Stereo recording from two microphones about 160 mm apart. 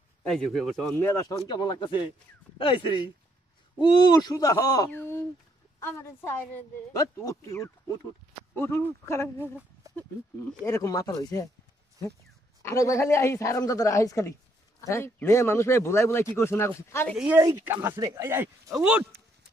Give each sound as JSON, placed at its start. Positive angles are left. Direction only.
{"t": 0.3, "sound": "speech", "side_deg": 0}
{"t": 0.9, "sound": "a woman's voice", "side_deg": 15}
{"t": 1.5, "sound": "a woman's voice", "side_deg": 30}
{"t": 9.4, "sound": "a sound", "side_deg": -10}
{"t": 10.6, "sound": "speech", "side_deg": 20}
{"t": 12.6, "sound": "a woman's voice", "side_deg": 20}
{"t": 17.4, "sound": "speech", "side_deg": -20}